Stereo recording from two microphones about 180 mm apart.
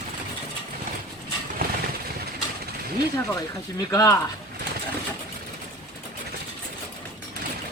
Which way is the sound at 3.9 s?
15° left (ahead or behind).